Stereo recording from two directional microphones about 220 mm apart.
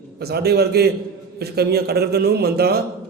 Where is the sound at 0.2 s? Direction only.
45° right (ahead or behind).